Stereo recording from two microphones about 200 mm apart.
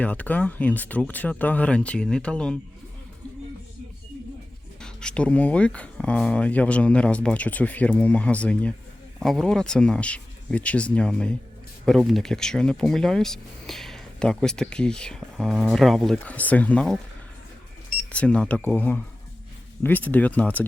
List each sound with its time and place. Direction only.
0.0 s speech: 5° left (ahead or behind)
4.8 s speech: 5° left (ahead or behind)
18.1 s speech: 5° left (ahead or behind)